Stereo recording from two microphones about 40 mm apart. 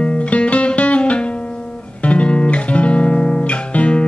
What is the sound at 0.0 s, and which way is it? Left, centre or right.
Music, left.